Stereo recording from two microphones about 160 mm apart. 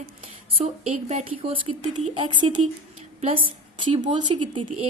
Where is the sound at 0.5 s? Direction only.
40° right (ahead or behind).